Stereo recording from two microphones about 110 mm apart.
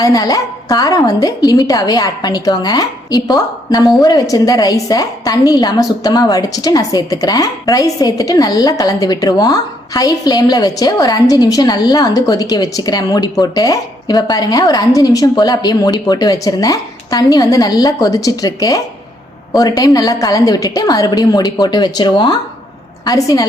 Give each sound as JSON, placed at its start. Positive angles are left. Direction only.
{"t": 0.0, "sound": "a woman's voice", "side_deg": 35}